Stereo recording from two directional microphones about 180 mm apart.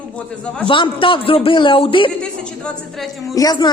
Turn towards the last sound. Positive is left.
turn(degrees=20)  # may be behind; listen again after turning